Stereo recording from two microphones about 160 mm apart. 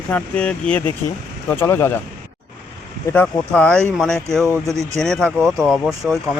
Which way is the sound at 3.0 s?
10° left (ahead or behind).